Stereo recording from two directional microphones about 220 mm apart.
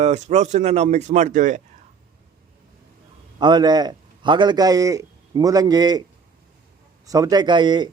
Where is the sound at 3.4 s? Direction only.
20° right (ahead or behind).